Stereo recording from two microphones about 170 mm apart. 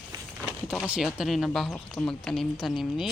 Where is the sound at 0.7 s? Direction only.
Centre (ahead or behind).